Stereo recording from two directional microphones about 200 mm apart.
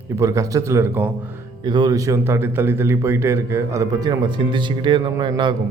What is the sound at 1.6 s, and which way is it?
A man's voice, 20° right (ahead or behind).